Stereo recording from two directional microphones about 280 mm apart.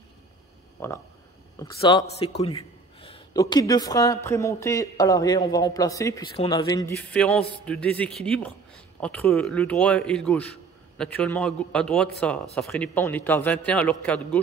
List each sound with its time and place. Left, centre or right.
0.8 s a man's voice: centre